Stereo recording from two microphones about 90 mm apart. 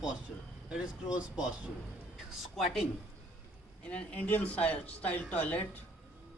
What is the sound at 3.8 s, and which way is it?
Speech, 15° left (ahead or behind).